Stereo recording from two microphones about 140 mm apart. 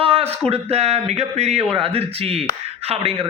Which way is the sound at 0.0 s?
45° right (ahead or behind).